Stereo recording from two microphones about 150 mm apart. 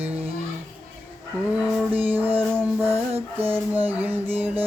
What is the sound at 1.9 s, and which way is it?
Music, 10° right (ahead or behind).